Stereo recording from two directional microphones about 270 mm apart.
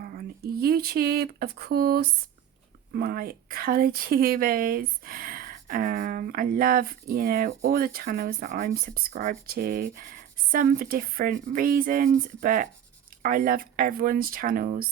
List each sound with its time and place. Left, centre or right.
0.0 s speech: right